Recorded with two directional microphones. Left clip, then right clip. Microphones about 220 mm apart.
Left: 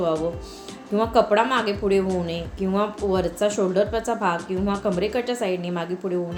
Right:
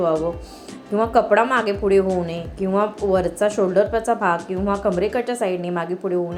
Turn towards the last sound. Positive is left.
turn(degrees=-5)  # may be behind; listen again after turning